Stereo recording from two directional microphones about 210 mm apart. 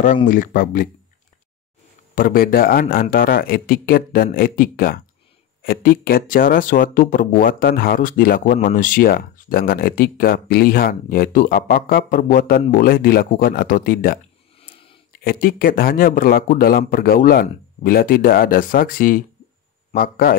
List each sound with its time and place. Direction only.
0.0 s speech: 40° left (ahead or behind)
2.1 s speech: 45° left (ahead or behind)
14.6 s a sound: 25° left (ahead or behind)
15.1 s speech: 45° left (ahead or behind)